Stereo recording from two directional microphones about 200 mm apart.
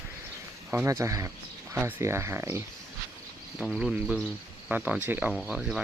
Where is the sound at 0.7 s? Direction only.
15° right (ahead or behind).